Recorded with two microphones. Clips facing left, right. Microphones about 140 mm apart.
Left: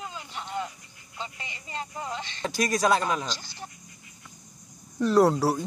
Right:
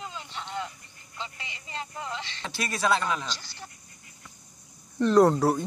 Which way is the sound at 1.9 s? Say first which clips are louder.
Left 1 dB; 15° left (ahead or behind).